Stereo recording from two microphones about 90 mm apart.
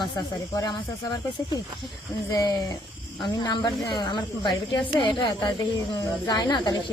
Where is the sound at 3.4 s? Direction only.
55° left (ahead or behind).